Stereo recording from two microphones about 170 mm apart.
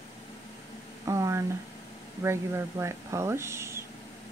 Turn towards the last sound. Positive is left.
turn(degrees=-15)  # may be behind; listen again after turning